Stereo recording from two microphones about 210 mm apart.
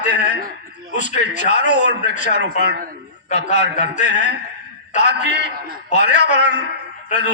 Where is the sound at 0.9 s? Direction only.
35° left (ahead or behind).